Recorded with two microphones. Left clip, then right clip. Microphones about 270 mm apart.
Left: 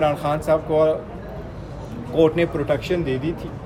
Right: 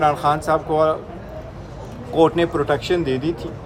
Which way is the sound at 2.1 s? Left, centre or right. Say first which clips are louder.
Right 2 dB; centre.